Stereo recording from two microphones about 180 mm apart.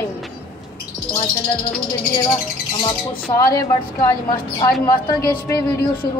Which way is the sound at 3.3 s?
15° left (ahead or behind).